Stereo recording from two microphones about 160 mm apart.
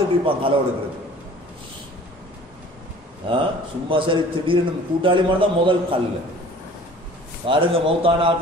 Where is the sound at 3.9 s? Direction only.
35° right (ahead or behind).